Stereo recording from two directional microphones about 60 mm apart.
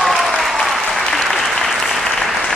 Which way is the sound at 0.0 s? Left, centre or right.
Centre.